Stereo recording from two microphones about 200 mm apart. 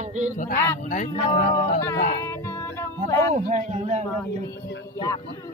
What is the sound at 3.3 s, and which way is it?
Speech, 35° right (ahead or behind).